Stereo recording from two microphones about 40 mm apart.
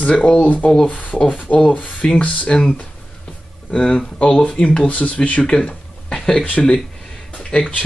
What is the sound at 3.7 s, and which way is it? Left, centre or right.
Speech, left.